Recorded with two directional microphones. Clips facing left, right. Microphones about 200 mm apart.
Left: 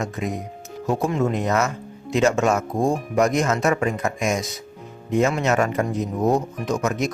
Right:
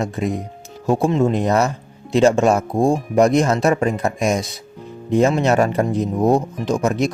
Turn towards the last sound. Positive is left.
turn(degrees=-30)  # may be behind; listen again after turning